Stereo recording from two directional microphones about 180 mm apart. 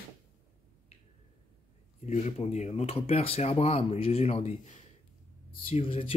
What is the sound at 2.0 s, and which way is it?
Speech, 40° left (ahead or behind).